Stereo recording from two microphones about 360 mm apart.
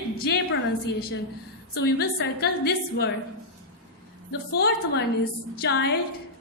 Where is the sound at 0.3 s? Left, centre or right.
Left.